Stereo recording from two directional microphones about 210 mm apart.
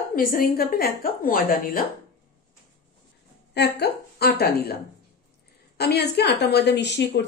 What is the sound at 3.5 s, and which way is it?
A woman's voice, 50° left (ahead or behind).